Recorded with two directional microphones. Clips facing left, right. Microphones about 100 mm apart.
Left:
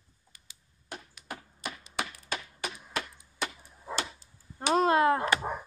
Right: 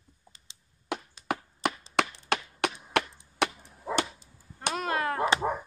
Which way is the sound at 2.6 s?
65° right (ahead or behind).